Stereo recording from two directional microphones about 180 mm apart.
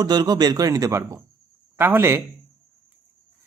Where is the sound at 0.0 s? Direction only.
20° right (ahead or behind).